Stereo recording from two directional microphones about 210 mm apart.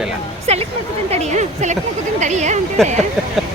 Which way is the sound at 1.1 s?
30° right (ahead or behind).